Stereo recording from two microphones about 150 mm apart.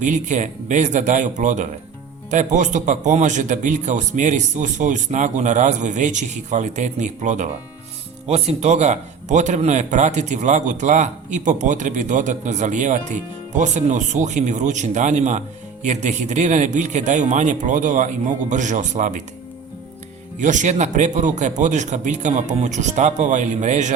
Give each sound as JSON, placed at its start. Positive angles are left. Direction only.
{"t": 0.0, "sound": "speech", "side_deg": -55}
{"t": 20.4, "sound": "speech", "side_deg": -55}